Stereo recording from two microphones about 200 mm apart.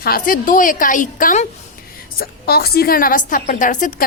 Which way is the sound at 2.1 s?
50° left (ahead or behind).